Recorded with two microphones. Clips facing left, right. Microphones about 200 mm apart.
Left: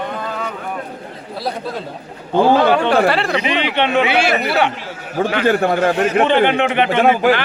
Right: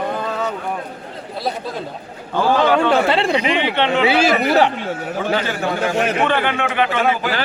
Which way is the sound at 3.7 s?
15° left (ahead or behind).